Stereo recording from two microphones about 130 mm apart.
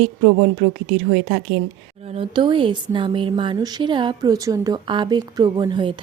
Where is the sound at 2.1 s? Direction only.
40° right (ahead or behind).